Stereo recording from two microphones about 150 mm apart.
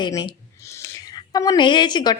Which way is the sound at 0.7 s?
20° left (ahead or behind).